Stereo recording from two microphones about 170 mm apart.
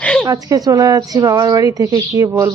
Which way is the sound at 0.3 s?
20° right (ahead or behind).